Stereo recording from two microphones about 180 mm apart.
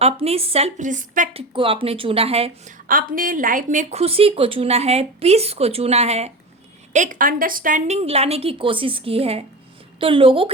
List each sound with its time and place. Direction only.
0.0 s a woman's voice: 35° right (ahead or behind)
2.7 s a woman's voice: 50° right (ahead or behind); by 10.5 s 30° right (ahead or behind)